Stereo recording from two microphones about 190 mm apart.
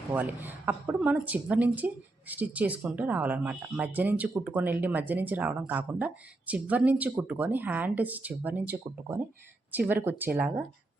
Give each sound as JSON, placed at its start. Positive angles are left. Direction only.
{"t": 0.1, "sound": "speech", "side_deg": -10}